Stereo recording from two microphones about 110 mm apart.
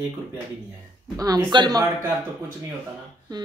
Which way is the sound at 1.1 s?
35° right (ahead or behind).